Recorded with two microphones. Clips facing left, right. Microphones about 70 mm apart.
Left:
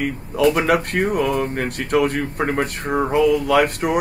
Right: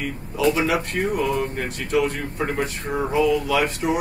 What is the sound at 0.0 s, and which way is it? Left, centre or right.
Speech, left.